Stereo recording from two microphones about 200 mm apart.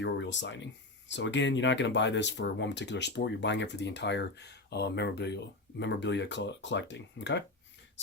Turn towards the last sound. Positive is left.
turn(degrees=65)  # may be behind; listen again after turning